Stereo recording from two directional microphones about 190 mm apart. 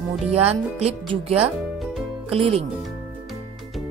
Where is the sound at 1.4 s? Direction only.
Centre (ahead or behind).